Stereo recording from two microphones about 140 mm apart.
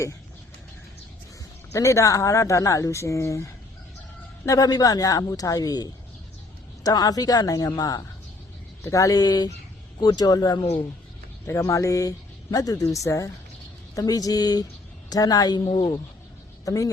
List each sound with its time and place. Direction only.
1.7 s speech: 20° left (ahead or behind)